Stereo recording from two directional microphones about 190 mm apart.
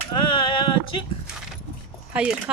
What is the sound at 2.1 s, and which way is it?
Speech, 5° right (ahead or behind).